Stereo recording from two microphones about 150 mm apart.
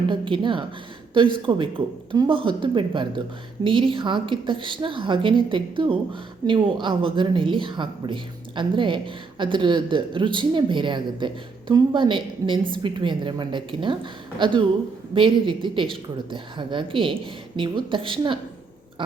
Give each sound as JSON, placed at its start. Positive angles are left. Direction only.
{"t": 0.1, "sound": "speech", "side_deg": -35}